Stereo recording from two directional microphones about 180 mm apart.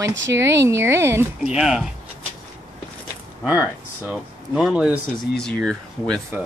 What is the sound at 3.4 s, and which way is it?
Speech, 5° right (ahead or behind).